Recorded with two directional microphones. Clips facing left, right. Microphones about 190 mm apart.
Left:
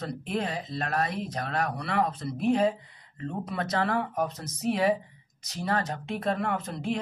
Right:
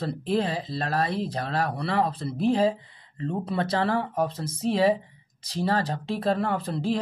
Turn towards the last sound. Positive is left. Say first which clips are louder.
# right 4 dB
turn(degrees=-35)  # may be behind; listen again after turning